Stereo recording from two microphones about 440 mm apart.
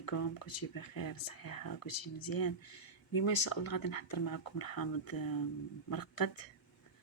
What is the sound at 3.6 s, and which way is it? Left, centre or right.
Speech, left.